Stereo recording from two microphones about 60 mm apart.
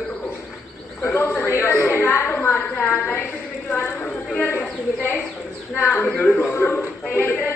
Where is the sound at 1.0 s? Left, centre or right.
Left.